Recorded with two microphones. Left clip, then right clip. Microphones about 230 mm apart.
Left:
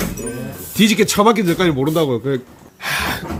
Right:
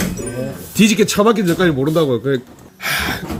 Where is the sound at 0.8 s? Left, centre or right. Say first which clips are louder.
Even; centre.